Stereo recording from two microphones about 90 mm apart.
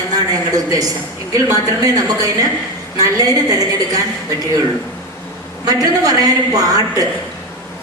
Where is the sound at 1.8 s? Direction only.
45° right (ahead or behind).